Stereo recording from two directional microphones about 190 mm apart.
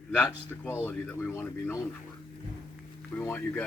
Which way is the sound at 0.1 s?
10° left (ahead or behind).